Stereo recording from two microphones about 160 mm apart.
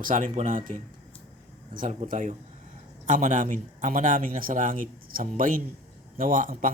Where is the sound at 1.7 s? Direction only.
55° right (ahead or behind).